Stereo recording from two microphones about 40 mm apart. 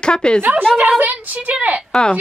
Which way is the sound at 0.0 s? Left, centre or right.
Left.